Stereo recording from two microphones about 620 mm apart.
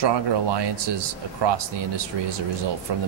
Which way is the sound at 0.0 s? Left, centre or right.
Right.